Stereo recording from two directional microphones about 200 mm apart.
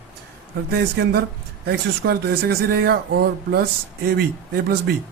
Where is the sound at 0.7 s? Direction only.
55° right (ahead or behind).